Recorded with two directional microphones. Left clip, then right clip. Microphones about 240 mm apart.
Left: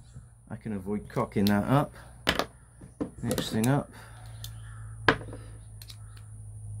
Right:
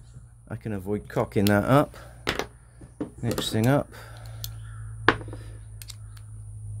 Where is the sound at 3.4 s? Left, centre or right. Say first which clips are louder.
Right 7 dB; right.